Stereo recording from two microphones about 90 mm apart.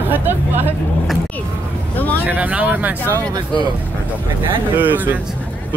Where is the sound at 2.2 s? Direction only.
20° right (ahead or behind).